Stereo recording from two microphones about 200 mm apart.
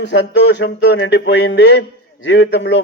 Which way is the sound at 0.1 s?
60° left (ahead or behind).